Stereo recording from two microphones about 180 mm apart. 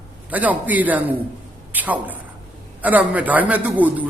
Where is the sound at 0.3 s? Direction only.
10° right (ahead or behind).